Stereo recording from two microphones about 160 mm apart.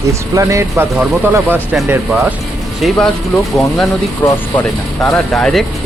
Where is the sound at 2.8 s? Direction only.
5° left (ahead or behind).